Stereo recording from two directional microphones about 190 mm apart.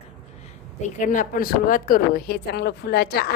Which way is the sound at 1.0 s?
45° left (ahead or behind).